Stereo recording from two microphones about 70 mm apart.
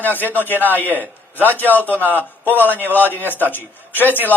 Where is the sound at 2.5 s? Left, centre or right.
Left.